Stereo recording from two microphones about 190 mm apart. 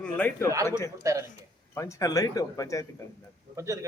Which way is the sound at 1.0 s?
15° right (ahead or behind).